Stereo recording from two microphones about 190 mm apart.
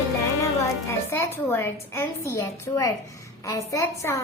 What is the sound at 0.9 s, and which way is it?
A woman's voice, 15° left (ahead or behind).